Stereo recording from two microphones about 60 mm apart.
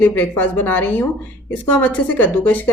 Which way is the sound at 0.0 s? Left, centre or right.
Left.